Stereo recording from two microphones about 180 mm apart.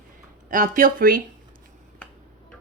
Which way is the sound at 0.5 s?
50° right (ahead or behind).